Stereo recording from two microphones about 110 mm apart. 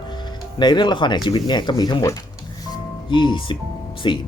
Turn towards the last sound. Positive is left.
turn(degrees=45)  # may be behind; listen again after turning